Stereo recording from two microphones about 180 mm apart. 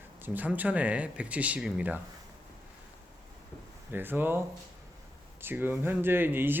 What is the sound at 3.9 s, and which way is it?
Speech, 10° right (ahead or behind).